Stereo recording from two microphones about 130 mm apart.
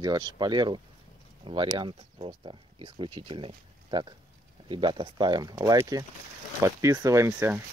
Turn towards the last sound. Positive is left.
turn(degrees=-15)  # may be behind; listen again after turning